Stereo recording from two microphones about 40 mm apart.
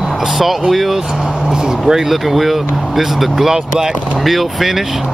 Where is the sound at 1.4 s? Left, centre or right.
Centre.